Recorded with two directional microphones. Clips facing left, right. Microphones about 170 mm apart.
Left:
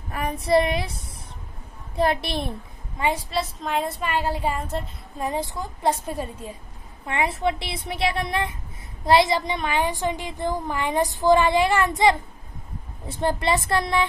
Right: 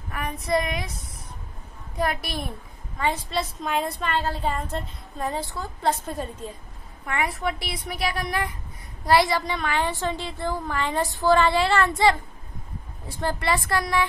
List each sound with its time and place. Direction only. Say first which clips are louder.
0.1 s a sound: left 5 dB; 30° left (ahead or behind)
2.0 s a woman's voice: left 4 dB; 30° left (ahead or behind)
3.0 s a woman's voice: left 1 dB; 10° left (ahead or behind)
5.2 s a woman's voice: left 2 dB; 15° left (ahead or behind)
7.1 s a woman's voice: left 3 dB; 25° left (ahead or behind)